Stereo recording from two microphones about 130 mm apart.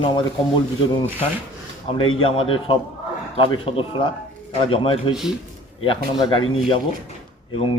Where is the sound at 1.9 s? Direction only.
40° left (ahead or behind).